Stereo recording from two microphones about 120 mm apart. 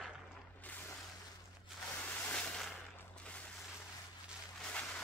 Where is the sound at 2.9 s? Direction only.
10° left (ahead or behind).